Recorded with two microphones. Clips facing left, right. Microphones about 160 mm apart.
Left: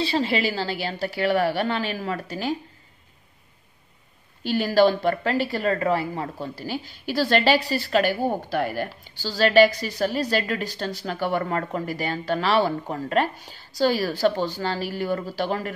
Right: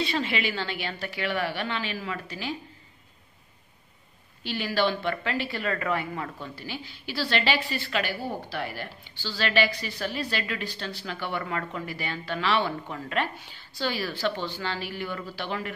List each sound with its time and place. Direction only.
0.0 s speech: 35° left (ahead or behind)
4.4 s speech: 45° left (ahead or behind)